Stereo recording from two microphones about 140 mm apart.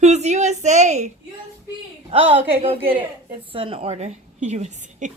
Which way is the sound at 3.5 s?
40° right (ahead or behind).